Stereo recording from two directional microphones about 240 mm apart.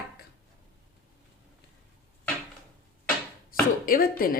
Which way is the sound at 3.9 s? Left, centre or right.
Left.